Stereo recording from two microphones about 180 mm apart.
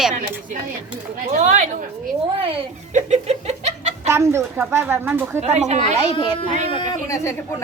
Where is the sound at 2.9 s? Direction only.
40° right (ahead or behind).